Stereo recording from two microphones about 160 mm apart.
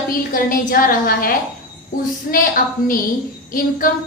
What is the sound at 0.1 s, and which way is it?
A woman's voice, 60° left (ahead or behind).